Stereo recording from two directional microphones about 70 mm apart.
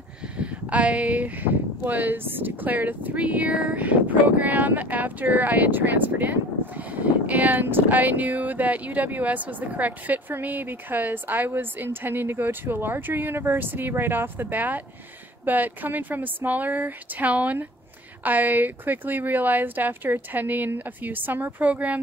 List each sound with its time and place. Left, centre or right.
0.4 s speech: centre